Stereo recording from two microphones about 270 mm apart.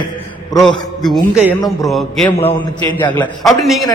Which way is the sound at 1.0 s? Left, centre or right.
Centre.